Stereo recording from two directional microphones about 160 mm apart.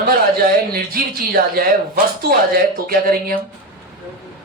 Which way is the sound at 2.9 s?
65° right (ahead or behind).